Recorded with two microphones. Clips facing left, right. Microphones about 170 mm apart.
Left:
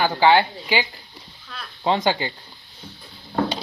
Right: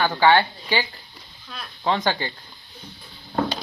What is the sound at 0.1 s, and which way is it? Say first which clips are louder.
Speech: left 1 dB; 20° left (ahead or behind).